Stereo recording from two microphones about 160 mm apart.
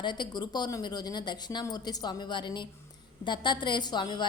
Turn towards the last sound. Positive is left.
turn(degrees=30)  # may be behind; listen again after turning